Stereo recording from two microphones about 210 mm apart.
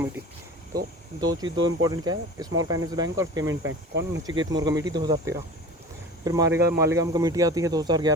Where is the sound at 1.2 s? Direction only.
20° right (ahead or behind).